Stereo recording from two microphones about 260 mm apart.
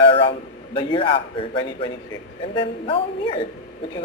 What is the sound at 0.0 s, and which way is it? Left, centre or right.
A man's voice, centre.